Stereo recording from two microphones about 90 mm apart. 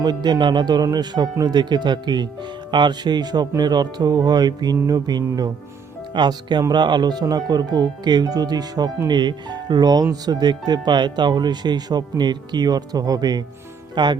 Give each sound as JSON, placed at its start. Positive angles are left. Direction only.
{"t": 0.0, "sound": "speech", "side_deg": -55}